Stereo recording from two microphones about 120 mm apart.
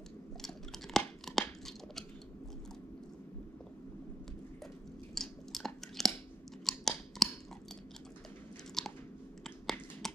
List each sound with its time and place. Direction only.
0.9 s tearing: 5° left (ahead or behind)
5.1 s chewing: 5° left (ahead or behind)
6.6 s scissors: centre (ahead or behind)
8.8 s chewing: 5° left (ahead or behind)
9.4 s a sound: 5° left (ahead or behind)